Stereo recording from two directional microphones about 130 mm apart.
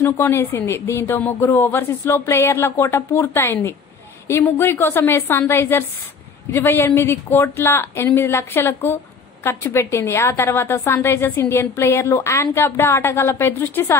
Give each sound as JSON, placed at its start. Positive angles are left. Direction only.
{"t": 0.0, "sound": "a woman's voice", "side_deg": 20}